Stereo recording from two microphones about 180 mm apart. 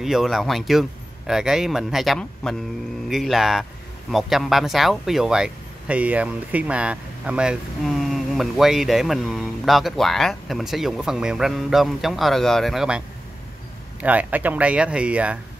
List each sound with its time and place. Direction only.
0.0 s speech: centre (ahead or behind)
14.0 s speech: 10° right (ahead or behind)